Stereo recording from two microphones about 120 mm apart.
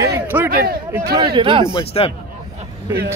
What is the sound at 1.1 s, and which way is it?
Speech, 40° right (ahead or behind).